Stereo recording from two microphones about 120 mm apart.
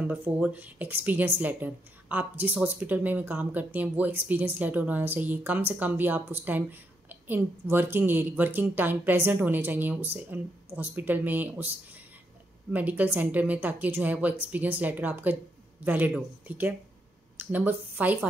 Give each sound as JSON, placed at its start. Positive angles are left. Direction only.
{"t": 0.0, "sound": "a woman's voice", "side_deg": -10}